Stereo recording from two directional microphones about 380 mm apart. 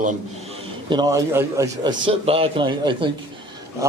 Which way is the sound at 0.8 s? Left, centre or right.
Centre.